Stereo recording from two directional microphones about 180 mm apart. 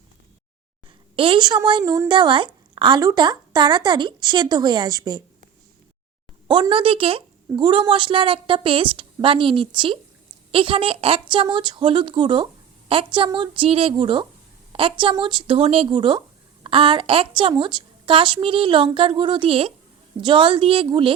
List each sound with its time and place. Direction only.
1.1 s a woman's voice: 30° right (ahead or behind)
6.5 s a woman's voice: 25° right (ahead or behind)